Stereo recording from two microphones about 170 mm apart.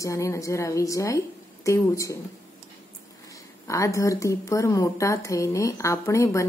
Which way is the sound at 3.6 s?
20° left (ahead or behind).